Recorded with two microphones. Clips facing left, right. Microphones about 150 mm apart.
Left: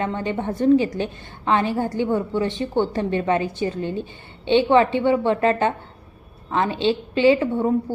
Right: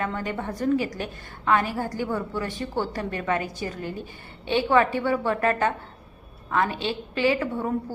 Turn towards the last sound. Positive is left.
turn(degrees=25)  # may be behind; listen again after turning